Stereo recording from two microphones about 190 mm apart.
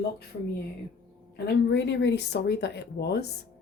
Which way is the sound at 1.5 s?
65° left (ahead or behind).